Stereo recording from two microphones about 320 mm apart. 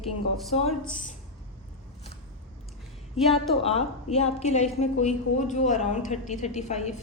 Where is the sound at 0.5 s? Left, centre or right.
Centre.